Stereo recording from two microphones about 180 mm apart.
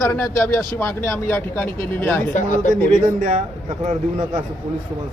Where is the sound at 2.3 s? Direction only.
45° left (ahead or behind).